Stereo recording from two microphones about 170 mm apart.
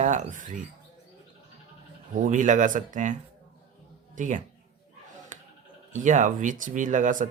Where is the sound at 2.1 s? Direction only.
50° right (ahead or behind).